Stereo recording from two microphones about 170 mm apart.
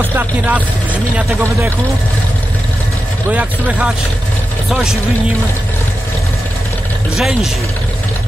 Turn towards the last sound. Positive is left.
turn(degrees=-5)  # may be behind; listen again after turning